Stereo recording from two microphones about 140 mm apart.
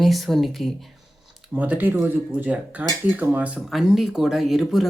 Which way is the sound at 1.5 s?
10° right (ahead or behind).